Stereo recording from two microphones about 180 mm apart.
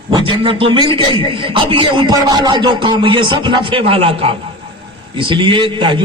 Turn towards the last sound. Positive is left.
turn(degrees=-25)  # may be behind; listen again after turning